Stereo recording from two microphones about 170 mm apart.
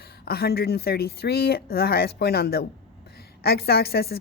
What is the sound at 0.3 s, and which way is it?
A woman's voice, 65° left (ahead or behind).